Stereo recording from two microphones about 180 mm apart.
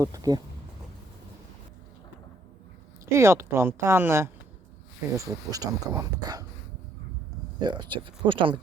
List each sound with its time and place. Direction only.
0.0 s speech: 20° right (ahead or behind)
3.1 s speech: 15° right (ahead or behind)
7.6 s speech: 25° right (ahead or behind)